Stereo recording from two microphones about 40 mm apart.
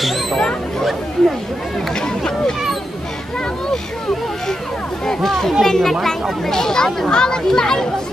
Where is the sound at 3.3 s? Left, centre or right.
Centre.